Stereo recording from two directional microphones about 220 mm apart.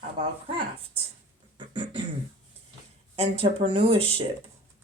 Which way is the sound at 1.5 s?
20° right (ahead or behind).